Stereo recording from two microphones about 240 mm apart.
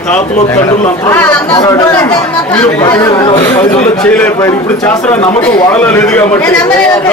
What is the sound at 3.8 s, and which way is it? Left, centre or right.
A man's voice, centre.